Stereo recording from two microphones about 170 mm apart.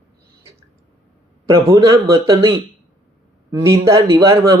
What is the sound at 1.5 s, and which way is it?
Speech, 20° right (ahead or behind).